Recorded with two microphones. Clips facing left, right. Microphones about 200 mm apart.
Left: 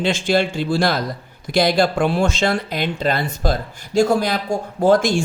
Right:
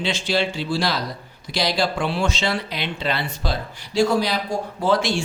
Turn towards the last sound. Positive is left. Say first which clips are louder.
# left 5 dB
turn(degrees=50)  # may be behind; listen again after turning